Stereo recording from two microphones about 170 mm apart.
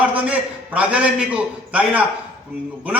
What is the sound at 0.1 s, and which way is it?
A man's voice, 10° right (ahead or behind).